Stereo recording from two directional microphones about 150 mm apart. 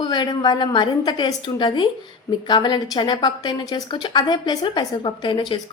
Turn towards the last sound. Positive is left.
turn(degrees=30)  # may be behind; listen again after turning